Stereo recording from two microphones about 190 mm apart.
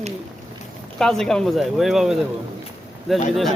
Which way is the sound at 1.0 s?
5° left (ahead or behind).